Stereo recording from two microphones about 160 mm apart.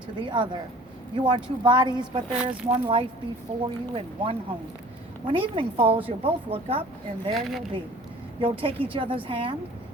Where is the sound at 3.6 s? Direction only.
30° right (ahead or behind).